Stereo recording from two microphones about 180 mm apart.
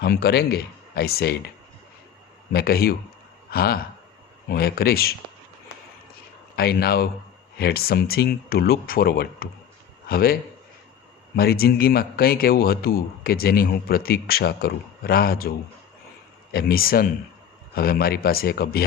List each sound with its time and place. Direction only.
0.0 s a man's voice: 60° left (ahead or behind)
2.5 s a man's voice: 60° left (ahead or behind)
6.6 s a man's voice: 60° left (ahead or behind)
11.3 s a man's voice: 60° left (ahead or behind)